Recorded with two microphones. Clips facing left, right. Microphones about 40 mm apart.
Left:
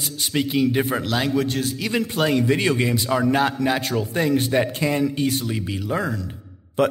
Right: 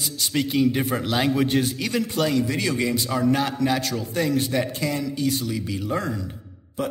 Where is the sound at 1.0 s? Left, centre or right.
Centre.